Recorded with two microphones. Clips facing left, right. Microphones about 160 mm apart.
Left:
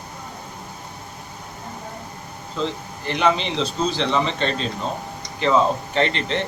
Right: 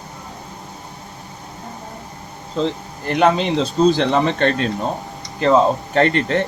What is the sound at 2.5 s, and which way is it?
Speech, 45° right (ahead or behind).